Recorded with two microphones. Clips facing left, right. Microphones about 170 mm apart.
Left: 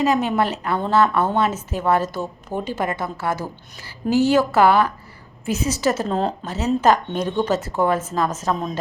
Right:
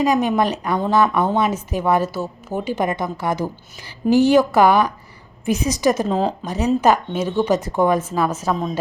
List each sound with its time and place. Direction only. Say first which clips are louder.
0.0 s a woman's voice: right 2 dB; 15° right (ahead or behind)
2.7 s a woman's voice: right 3 dB; 15° right (ahead or behind)
6.1 s speech: right 2 dB; centre (ahead or behind)
6.4 s a woman's voice: right 1 dB; 15° right (ahead or behind)